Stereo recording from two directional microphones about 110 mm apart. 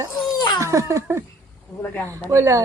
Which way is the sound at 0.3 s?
35° left (ahead or behind).